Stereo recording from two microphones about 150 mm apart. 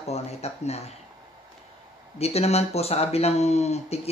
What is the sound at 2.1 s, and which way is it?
Speech, 45° left (ahead or behind).